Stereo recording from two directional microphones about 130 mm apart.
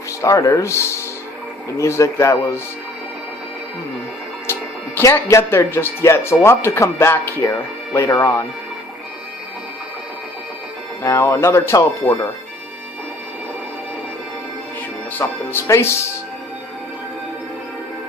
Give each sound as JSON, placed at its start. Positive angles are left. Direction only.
{"t": 0.2, "sound": "speech", "side_deg": 25}
{"t": 4.9, "sound": "speech", "side_deg": 20}
{"t": 11.0, "sound": "speech", "side_deg": 25}
{"t": 15.2, "sound": "speech", "side_deg": 20}